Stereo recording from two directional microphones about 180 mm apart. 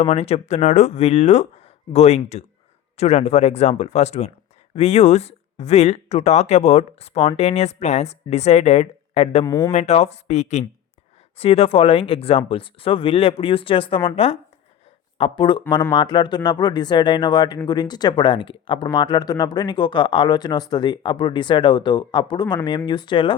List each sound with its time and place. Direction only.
0.0 s speech: 35° left (ahead or behind)
9.4 s speech: 20° left (ahead or behind)
9.7 s speech: 35° left (ahead or behind)